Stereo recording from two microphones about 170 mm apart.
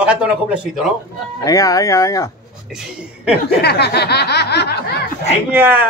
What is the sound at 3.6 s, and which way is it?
Speech, 70° left (ahead or behind).